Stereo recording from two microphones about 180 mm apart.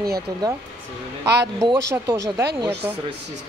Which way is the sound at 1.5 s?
15° right (ahead or behind).